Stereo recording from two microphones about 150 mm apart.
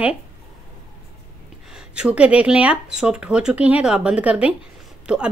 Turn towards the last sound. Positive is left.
turn(degrees=-5)  # may be behind; listen again after turning